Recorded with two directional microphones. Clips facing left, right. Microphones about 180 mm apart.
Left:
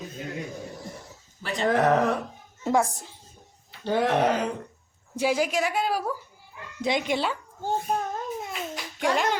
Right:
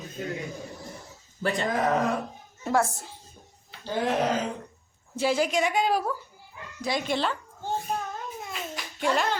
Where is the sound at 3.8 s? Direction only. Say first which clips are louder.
Left 4 dB; 65° left (ahead or behind).